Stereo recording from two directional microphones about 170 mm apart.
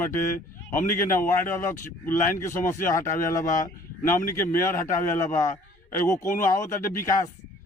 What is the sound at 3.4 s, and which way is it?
Speech, 50° left (ahead or behind).